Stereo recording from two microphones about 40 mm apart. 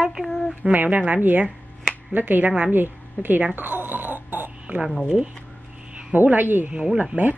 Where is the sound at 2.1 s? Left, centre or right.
Right.